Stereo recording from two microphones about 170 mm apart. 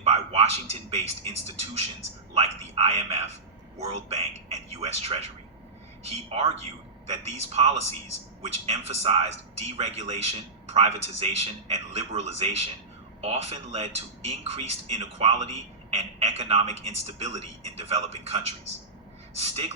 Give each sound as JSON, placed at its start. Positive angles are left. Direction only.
{"t": 0.0, "sound": "a man's voice", "side_deg": -35}